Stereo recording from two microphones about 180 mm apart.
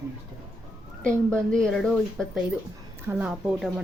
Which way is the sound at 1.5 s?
Centre (ahead or behind).